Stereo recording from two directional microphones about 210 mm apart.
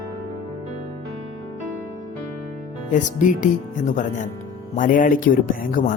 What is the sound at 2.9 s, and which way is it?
Speech, 35° left (ahead or behind).